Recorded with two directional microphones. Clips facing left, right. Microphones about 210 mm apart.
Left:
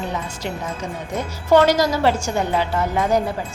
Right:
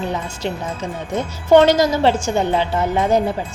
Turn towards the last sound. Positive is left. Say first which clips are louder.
# right 2 dB
turn(degrees=-25)  # may be behind; listen again after turning